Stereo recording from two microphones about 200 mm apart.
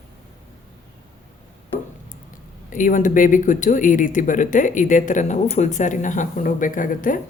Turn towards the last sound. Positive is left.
turn(degrees=40)  # may be behind; listen again after turning